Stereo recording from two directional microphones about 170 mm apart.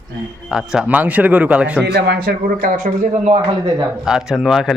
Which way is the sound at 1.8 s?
75° right (ahead or behind).